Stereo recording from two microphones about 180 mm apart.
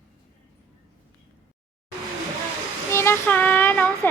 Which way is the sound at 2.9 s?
15° left (ahead or behind).